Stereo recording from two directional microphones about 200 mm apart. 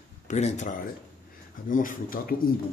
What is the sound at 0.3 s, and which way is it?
Speech, 35° left (ahead or behind).